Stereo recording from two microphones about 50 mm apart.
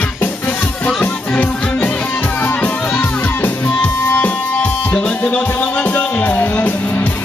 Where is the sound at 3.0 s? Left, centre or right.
Left.